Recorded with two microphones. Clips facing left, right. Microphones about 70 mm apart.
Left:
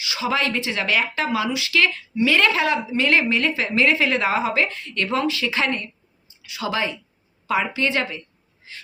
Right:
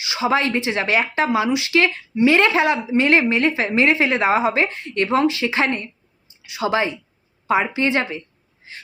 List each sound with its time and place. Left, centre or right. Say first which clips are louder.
0.0 s speech: right 4 dB; right